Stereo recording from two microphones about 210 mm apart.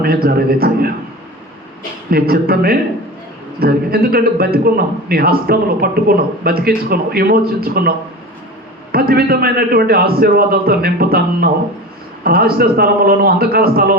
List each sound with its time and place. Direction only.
0.0 s a man's voice: 45° right (ahead or behind)
2.0 s a man's voice: 45° right (ahead or behind)